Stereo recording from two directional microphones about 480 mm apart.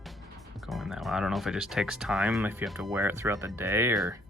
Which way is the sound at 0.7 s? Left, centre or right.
Centre.